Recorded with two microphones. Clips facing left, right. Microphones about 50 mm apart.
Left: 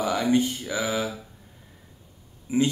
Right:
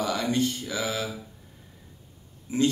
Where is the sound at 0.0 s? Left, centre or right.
Centre.